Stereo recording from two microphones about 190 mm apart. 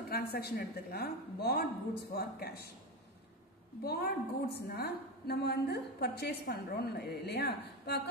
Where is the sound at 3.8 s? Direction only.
55° left (ahead or behind).